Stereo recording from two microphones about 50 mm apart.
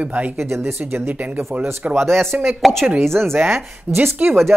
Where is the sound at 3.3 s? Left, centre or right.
Right.